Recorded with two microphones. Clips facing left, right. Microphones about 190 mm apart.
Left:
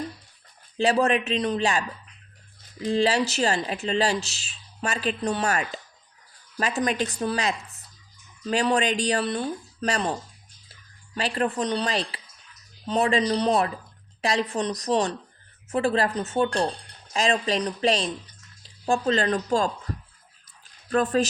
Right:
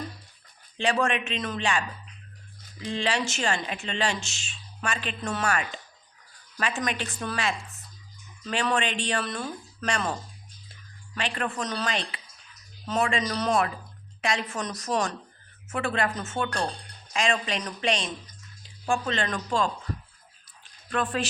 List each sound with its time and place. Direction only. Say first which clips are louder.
0.8 s speech: left 4 dB; 40° left (ahead or behind)
20.9 s speech: left 6 dB; 40° left (ahead or behind)